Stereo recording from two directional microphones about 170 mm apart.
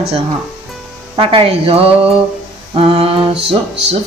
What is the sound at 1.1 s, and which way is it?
Speech, 35° right (ahead or behind).